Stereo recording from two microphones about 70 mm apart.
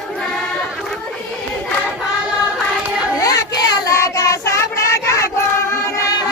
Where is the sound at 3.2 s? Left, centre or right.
Left.